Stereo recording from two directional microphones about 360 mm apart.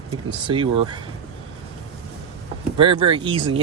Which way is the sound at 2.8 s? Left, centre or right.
Centre.